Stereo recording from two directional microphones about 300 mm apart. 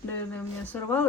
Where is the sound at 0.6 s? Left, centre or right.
Centre.